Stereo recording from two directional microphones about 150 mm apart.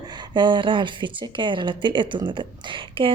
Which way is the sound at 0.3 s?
30° right (ahead or behind).